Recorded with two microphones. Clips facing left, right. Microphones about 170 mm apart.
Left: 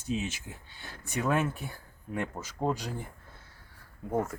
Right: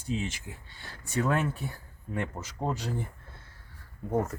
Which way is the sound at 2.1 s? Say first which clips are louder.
Even; 5° left (ahead or behind).